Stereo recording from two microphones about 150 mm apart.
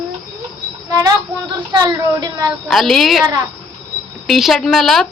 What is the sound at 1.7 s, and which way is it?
Speech, 25° right (ahead or behind).